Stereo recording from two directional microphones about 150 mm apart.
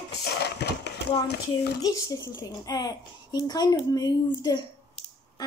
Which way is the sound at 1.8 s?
25° left (ahead or behind).